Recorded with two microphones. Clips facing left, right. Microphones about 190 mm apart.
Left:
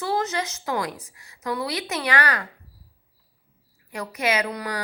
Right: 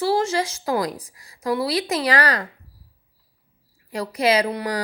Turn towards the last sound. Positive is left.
turn(degrees=-30)  # may be behind; listen again after turning